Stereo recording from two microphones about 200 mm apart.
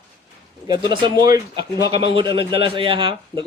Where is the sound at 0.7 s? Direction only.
20° right (ahead or behind).